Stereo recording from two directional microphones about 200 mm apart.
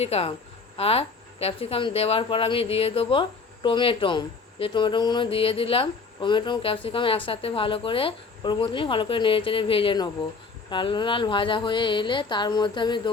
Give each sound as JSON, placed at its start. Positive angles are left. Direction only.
{"t": 0.0, "sound": "speech", "side_deg": 30}